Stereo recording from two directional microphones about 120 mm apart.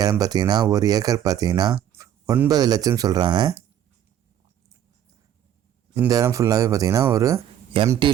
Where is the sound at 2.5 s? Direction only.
30° right (ahead or behind).